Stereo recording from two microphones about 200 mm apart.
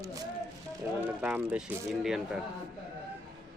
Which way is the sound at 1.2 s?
5° right (ahead or behind).